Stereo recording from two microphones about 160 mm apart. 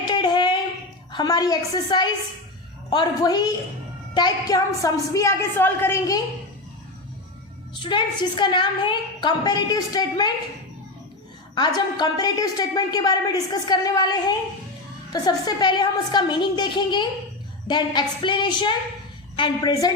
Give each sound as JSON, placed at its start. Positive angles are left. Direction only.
{"t": 0.1, "sound": "a sound", "side_deg": 30}
{"t": 1.1, "sound": "a woman's voice", "side_deg": 25}
{"t": 7.7, "sound": "a woman's voice", "side_deg": 30}
{"t": 11.5, "sound": "a woman's voice", "side_deg": 25}